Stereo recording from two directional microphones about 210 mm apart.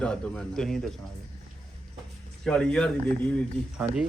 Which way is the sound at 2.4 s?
5° left (ahead or behind).